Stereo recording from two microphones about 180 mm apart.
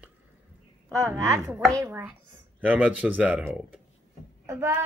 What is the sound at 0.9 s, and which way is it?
A woman's voice, 15° right (ahead or behind).